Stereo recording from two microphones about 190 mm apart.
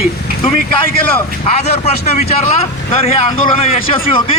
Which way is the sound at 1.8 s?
35° left (ahead or behind).